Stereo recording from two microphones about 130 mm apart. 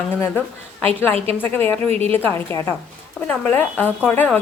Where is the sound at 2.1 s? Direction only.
15° left (ahead or behind).